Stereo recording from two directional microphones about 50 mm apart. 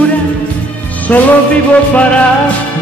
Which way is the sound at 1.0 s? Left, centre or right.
Left.